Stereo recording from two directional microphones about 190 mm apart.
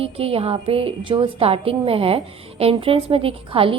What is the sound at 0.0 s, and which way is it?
A woman's voice, 30° right (ahead or behind).